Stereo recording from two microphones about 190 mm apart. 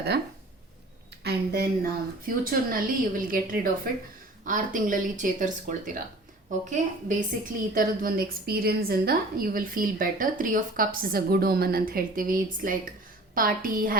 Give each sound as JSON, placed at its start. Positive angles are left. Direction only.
{"t": 1.2, "sound": "a woman's voice", "side_deg": -55}